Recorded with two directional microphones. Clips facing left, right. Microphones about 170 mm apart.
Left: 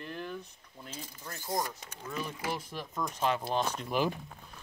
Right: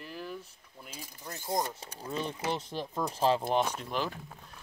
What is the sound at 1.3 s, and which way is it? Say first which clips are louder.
Speech: right 2 dB; 20° right (ahead or behind).